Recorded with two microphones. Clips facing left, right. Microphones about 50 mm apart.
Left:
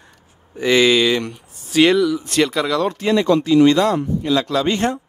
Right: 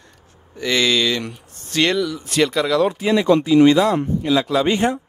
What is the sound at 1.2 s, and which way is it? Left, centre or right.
A man's voice, centre.